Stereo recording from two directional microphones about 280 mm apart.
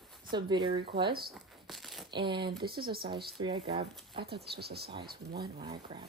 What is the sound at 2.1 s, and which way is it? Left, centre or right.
Speech, centre.